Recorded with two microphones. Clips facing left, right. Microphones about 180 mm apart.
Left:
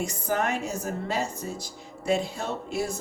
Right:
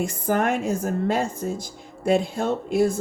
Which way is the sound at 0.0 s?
50° right (ahead or behind).